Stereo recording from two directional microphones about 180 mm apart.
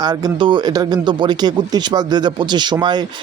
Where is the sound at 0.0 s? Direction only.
20° right (ahead or behind).